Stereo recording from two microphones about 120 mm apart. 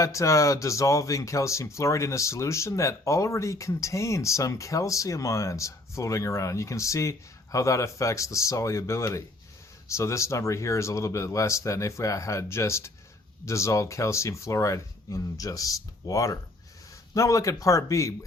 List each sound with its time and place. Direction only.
0.0 s speech: 25° left (ahead or behind)